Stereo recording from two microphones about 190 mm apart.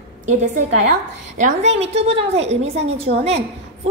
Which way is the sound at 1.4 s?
35° right (ahead or behind).